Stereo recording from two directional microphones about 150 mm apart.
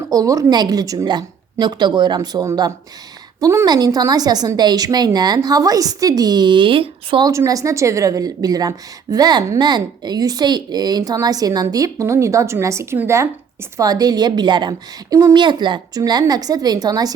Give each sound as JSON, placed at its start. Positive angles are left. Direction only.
{"t": 0.1, "sound": "a woman's voice", "side_deg": -25}
{"t": 7.3, "sound": "a woman's voice", "side_deg": -20}